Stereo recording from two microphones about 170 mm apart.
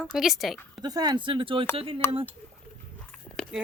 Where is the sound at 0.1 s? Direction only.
Centre (ahead or behind).